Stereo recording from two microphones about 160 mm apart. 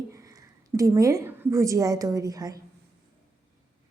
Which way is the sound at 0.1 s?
20° right (ahead or behind).